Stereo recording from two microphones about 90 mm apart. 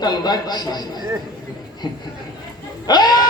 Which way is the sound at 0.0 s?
50° left (ahead or behind).